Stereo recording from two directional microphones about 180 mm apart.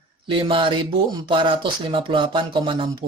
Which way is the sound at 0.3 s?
30° right (ahead or behind).